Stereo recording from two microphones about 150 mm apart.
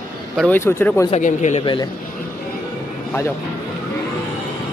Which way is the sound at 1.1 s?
50° left (ahead or behind).